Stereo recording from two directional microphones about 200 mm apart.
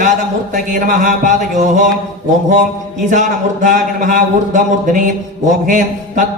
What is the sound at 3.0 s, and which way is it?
A man's voice, 40° right (ahead or behind).